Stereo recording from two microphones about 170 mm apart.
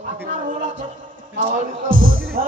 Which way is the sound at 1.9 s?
55° right (ahead or behind).